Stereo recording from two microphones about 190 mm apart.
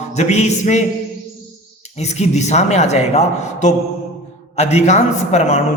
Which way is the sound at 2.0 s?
35° left (ahead or behind).